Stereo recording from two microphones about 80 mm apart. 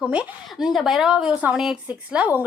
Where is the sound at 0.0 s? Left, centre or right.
Centre.